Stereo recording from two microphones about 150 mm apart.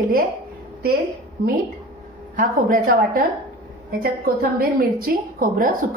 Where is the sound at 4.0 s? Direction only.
80° right.